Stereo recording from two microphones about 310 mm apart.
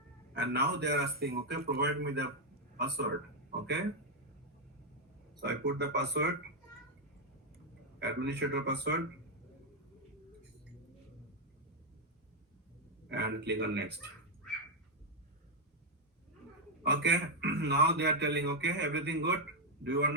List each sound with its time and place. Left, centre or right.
0.3 s a man's voice: right
5.4 s a man's voice: right
7.9 s a man's voice: right
13.1 s a man's voice: right
16.8 s a man's voice: right